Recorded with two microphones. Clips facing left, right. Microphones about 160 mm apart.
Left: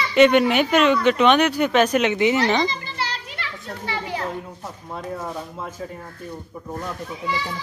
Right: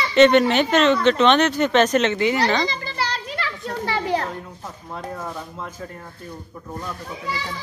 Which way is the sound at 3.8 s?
40° right (ahead or behind).